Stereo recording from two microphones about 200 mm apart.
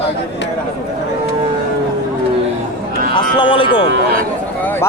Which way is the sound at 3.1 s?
25° left (ahead or behind).